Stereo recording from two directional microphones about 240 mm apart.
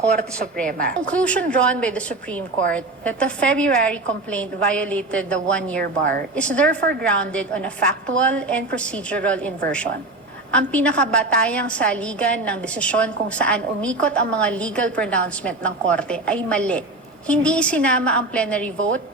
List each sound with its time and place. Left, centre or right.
1.1 s a woman's voice: centre
5.8 s speech: right
6.3 s a woman's voice: centre
10.5 s a woman's voice: centre